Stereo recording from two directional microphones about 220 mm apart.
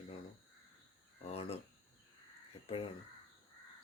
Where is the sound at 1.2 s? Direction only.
25° left (ahead or behind).